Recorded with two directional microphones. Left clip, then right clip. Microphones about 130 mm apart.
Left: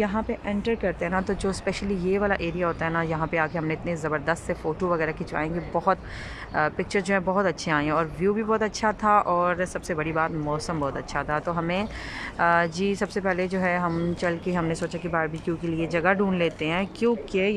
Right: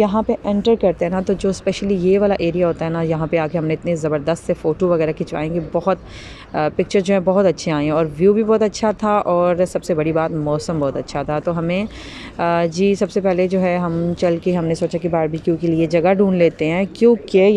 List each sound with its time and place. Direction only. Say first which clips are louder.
0.0 s speech: right 10 dB; 25° right (ahead or behind)